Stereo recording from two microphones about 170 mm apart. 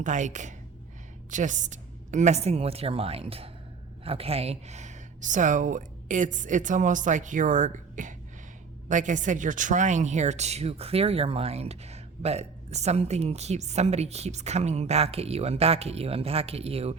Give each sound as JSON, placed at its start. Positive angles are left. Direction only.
{"t": 0.0, "sound": "speech", "side_deg": -45}